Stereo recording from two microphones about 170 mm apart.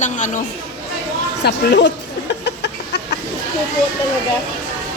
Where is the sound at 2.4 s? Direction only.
80° left.